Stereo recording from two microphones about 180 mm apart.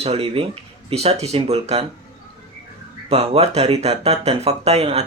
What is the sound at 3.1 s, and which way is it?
Speech, 35° right (ahead or behind).